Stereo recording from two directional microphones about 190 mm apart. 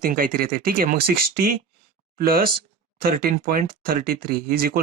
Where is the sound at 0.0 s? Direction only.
45° right (ahead or behind).